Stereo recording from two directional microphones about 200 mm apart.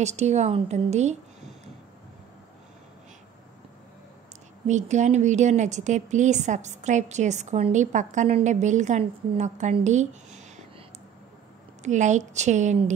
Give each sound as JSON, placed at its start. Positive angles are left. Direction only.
{"t": 0.0, "sound": "a woman's voice", "side_deg": -35}
{"t": 4.6, "sound": "a woman's voice", "side_deg": -35}
{"t": 11.8, "sound": "a woman's voice", "side_deg": -35}